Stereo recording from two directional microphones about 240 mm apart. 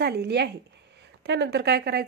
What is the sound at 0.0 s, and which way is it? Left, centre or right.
Speech, right.